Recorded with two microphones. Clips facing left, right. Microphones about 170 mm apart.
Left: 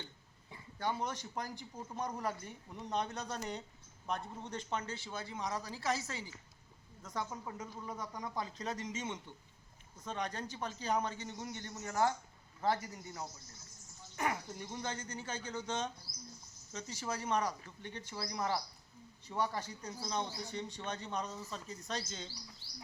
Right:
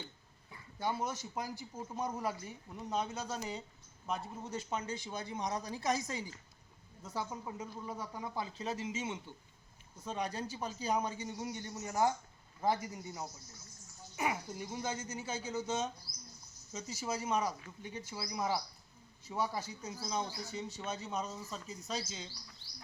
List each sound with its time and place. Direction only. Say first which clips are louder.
0.8 s speech: right 1 dB; 10° right (ahead or behind)